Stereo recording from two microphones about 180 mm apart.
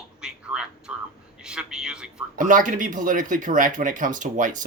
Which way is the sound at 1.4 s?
5° right (ahead or behind).